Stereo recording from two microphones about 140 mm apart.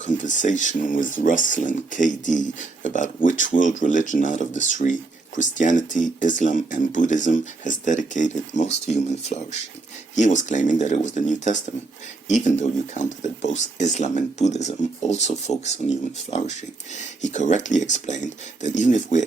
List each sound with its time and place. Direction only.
0.0 s speech: 65° left (ahead or behind)